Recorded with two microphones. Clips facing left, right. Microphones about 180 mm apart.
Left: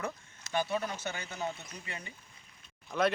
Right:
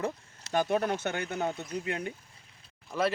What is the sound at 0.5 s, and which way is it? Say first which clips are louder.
Speech: right 5 dB; 50° right (ahead or behind).